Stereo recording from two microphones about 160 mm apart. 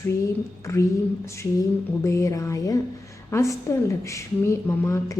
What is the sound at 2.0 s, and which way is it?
A woman's voice, 20° left (ahead or behind).